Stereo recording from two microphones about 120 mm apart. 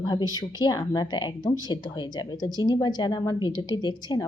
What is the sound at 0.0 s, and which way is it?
Speech, 35° left (ahead or behind).